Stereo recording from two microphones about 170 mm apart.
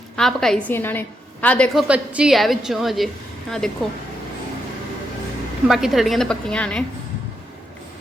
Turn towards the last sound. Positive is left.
turn(degrees=5)  # may be behind; listen again after turning